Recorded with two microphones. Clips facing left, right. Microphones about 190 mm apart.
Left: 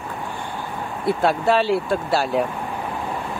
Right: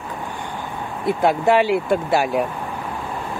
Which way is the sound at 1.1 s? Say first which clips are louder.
Right 2 dB; 15° right (ahead or behind).